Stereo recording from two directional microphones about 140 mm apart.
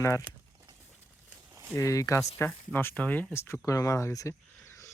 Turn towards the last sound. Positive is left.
turn(degrees=20)  # may be behind; listen again after turning